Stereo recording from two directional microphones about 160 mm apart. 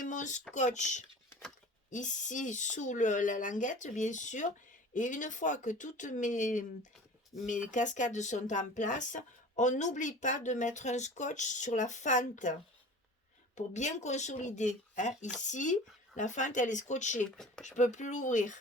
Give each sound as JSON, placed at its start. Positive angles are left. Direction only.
{"t": 0.0, "sound": "a sound", "side_deg": 50}
{"t": 0.5, "sound": "speech", "side_deg": 50}
{"t": 1.3, "sound": "a sound", "side_deg": 0}
{"t": 1.9, "sound": "speech", "side_deg": 50}
{"t": 13.6, "sound": "speech", "side_deg": 50}
{"t": 17.2, "sound": "speech", "side_deg": 5}
{"t": 17.6, "sound": "speech", "side_deg": 50}